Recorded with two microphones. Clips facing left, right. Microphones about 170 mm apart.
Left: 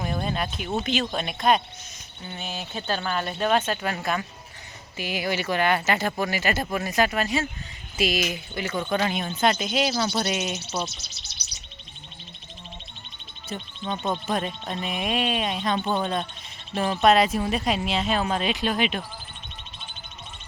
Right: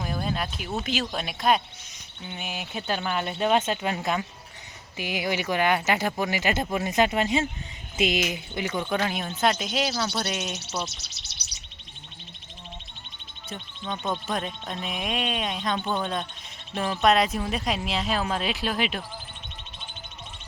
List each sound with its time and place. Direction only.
0.0 s a sound: centre (ahead or behind)
0.8 s speech: 5° right (ahead or behind)
2.2 s speech: 15° right (ahead or behind)
9.0 s speech: centre (ahead or behind)
10.6 s speech: 70° right (ahead or behind)
13.5 s speech: 5° left (ahead or behind)